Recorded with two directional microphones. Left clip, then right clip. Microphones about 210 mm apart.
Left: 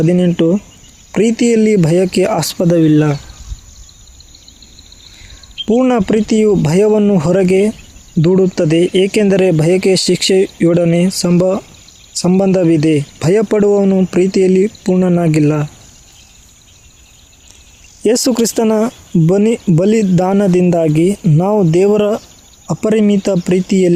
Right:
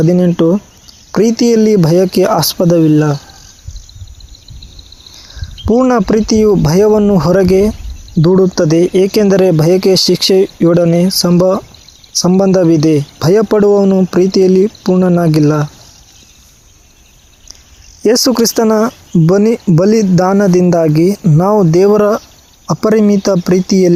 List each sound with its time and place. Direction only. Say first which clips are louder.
0.0 s speech: right 2 dB; 5° right (ahead or behind)
5.6 s speech: right 2 dB; 5° right (ahead or behind)
18.0 s speech: right 3 dB; 5° right (ahead or behind)